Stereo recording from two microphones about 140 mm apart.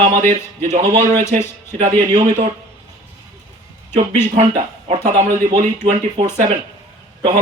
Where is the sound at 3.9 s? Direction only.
60° right (ahead or behind).